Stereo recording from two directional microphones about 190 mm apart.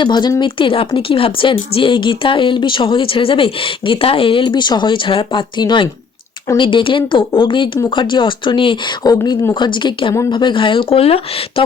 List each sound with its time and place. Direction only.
0.0 s speech: 25° left (ahead or behind)